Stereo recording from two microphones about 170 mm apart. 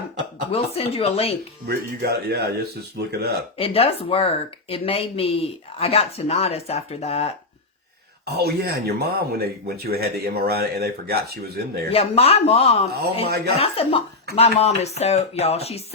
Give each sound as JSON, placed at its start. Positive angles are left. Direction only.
{"t": 0.5, "sound": "speech", "side_deg": 35}
{"t": 1.6, "sound": "speech", "side_deg": -70}
{"t": 3.6, "sound": "speech", "side_deg": 35}
{"t": 8.2, "sound": "speech", "side_deg": -70}
{"t": 11.9, "sound": "speech", "side_deg": 35}